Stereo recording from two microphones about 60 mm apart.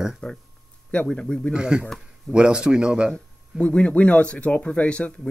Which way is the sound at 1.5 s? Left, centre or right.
Centre.